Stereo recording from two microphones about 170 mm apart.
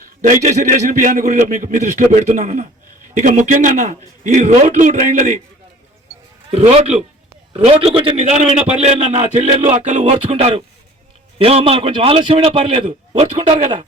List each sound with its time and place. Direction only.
0.2 s a man's voice: 50° right (ahead or behind)
6.6 s a man's voice: 35° right (ahead or behind)